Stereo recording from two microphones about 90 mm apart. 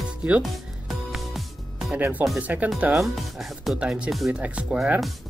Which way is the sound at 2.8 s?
5° right (ahead or behind).